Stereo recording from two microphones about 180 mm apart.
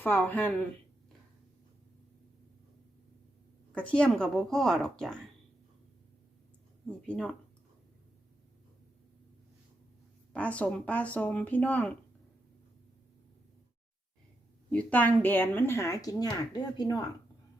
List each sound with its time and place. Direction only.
0.0 s speech: 10° left (ahead or behind)
3.8 s a woman's voice: 5° left (ahead or behind)
6.8 s a woman's voice: 5° left (ahead or behind)
10.3 s speech: 5° left (ahead or behind)
14.7 s speech: 10° left (ahead or behind)